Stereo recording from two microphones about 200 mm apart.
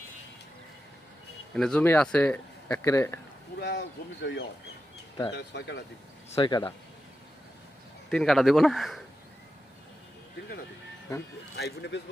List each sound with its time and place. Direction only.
1.5 s speech: 5° left (ahead or behind)
3.6 s speech: 60° left (ahead or behind)
6.3 s speech: 25° left (ahead or behind)
8.1 s speech: centre (ahead or behind)
11.5 s speech: 60° left (ahead or behind)